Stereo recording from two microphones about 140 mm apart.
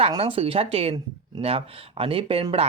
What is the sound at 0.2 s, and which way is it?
Speech, 40° right (ahead or behind).